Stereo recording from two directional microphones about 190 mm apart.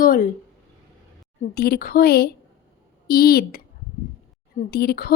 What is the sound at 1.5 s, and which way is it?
A woman's voice, 55° left (ahead or behind).